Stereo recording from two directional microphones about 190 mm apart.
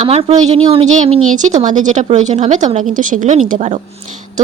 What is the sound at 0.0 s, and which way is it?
A woman's voice, 35° right (ahead or behind).